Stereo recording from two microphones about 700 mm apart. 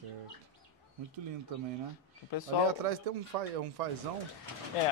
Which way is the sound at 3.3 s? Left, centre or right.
Right.